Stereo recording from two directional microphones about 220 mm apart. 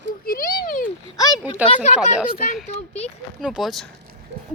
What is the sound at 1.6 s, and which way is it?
Speech, 30° left (ahead or behind).